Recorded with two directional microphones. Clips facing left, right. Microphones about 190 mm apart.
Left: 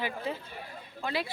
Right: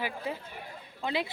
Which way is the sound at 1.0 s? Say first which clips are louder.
Right 1 dB; 20° right (ahead or behind).